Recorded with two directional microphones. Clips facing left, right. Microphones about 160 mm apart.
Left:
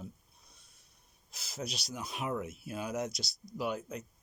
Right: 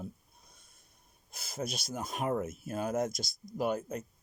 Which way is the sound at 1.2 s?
55° right (ahead or behind).